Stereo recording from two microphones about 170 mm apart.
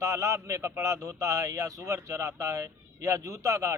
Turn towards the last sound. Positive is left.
turn(degrees=-20)  # may be behind; listen again after turning